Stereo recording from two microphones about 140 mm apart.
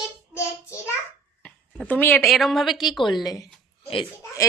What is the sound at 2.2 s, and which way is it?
Speech, centre (ahead or behind).